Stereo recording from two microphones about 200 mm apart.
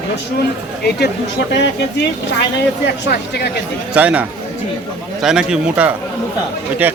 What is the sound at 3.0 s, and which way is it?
Speech, 55° left (ahead or behind).